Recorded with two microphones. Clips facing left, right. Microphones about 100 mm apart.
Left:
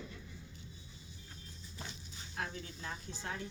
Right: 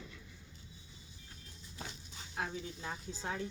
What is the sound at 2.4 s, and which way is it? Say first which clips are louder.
Speech: right 2 dB; 15° right (ahead or behind).